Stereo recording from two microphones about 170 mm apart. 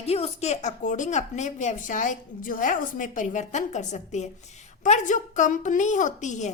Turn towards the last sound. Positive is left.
turn(degrees=45)  # may be behind; listen again after turning